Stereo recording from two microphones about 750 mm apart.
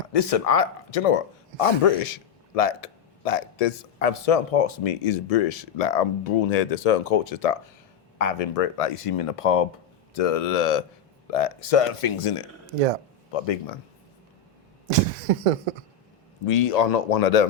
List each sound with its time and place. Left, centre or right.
0.1 s speech: left
14.8 s a sound: right
16.5 s speech: left